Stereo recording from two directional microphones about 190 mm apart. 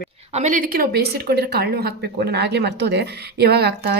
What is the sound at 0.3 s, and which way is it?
A woman's voice, 35° right (ahead or behind).